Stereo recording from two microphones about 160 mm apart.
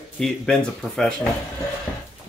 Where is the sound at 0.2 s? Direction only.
5° left (ahead or behind).